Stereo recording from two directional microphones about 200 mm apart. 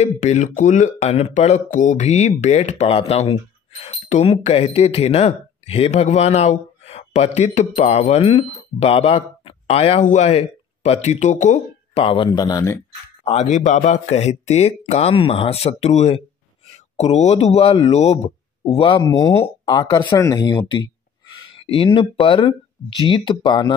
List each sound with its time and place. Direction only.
0.0 s speech: 35° left (ahead or behind); by 12.7 s 20° left (ahead or behind)
13.2 s speech: 35° left (ahead or behind)